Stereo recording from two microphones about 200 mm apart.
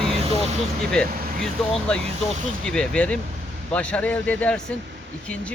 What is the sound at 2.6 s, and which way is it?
A man's voice, 5° left (ahead or behind).